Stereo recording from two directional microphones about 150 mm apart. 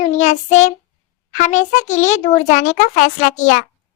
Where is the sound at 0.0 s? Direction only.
50° left (ahead or behind).